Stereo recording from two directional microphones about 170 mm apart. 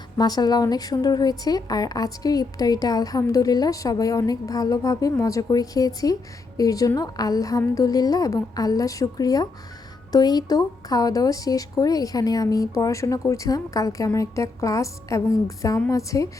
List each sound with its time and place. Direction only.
0.2 s a woman's voice: 25° left (ahead or behind)